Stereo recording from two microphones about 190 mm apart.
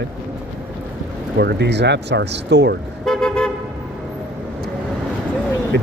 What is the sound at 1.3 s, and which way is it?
Speech, 60° right (ahead or behind).